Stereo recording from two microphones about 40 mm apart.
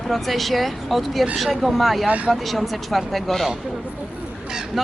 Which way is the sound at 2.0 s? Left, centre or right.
Right.